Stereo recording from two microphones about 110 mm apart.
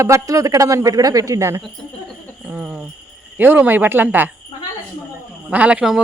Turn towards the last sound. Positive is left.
turn(degrees=-10)  # may be behind; listen again after turning